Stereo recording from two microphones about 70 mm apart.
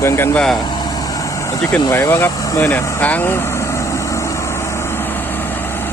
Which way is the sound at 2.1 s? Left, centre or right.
Left.